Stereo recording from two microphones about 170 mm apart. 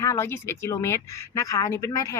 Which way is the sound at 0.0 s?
15° left (ahead or behind).